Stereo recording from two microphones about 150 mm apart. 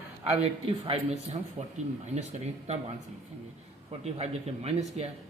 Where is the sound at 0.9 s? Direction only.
45° right (ahead or behind).